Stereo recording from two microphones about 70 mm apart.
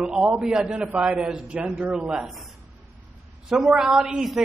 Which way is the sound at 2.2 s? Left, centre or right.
Centre.